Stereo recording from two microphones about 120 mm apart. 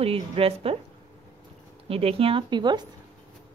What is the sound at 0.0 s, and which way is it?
Speech, 55° right (ahead or behind).